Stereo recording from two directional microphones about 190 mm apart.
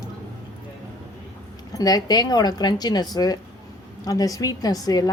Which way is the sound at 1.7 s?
20° left (ahead or behind).